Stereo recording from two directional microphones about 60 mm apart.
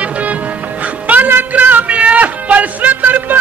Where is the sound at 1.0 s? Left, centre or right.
Right.